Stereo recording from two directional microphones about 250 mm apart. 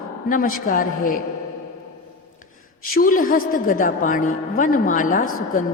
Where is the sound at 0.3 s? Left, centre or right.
Left.